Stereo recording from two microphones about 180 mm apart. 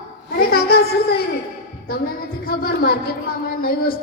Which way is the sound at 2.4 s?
55° left (ahead or behind).